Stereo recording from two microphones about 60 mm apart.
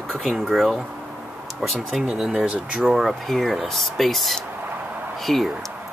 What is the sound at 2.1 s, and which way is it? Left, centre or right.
Speech, centre.